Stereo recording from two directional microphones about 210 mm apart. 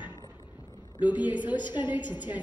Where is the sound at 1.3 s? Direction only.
20° left (ahead or behind).